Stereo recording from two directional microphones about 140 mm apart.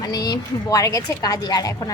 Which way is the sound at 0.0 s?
30° left (ahead or behind).